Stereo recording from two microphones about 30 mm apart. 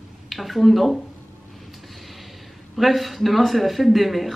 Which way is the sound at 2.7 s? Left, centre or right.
Centre.